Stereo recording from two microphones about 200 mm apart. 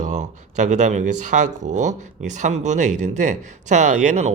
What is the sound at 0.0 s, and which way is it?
Speech, 35° right (ahead or behind).